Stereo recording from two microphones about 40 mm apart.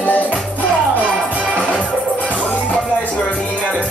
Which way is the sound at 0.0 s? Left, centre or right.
Left.